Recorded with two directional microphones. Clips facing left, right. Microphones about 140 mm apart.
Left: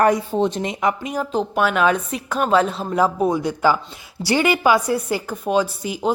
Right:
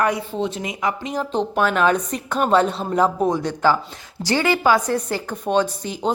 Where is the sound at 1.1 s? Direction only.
5° left (ahead or behind).